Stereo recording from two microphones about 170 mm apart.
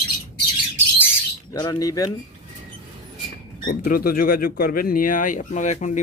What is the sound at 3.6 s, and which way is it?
Speech, 60° left (ahead or behind).